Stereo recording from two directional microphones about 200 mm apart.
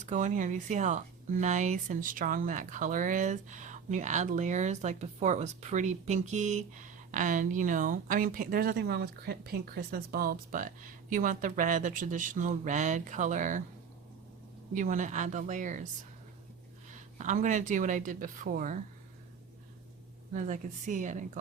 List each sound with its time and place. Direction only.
0.0 s speech: 35° right (ahead or behind)
14.8 s speech: 40° right (ahead or behind)
16.9 s speech: 40° right (ahead or behind)
20.3 s speech: 40° right (ahead or behind)